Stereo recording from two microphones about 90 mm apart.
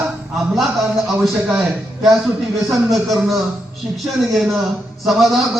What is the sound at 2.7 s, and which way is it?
Speech, centre (ahead or behind).